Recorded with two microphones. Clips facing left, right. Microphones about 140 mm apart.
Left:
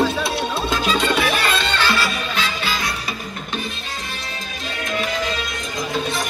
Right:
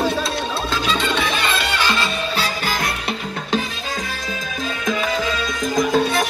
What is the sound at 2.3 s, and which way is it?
Music, 40° right (ahead or behind).